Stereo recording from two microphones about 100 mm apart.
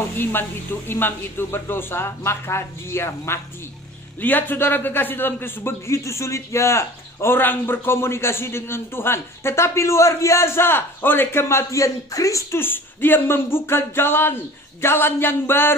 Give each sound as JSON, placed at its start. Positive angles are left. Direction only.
{"t": 0.2, "sound": "a man's voice", "side_deg": 20}